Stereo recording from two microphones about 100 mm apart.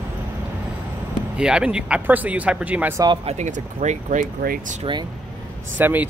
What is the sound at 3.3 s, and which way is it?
Speech, 90° right.